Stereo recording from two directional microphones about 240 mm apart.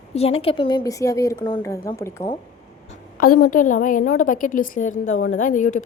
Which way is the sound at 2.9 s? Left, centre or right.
Left.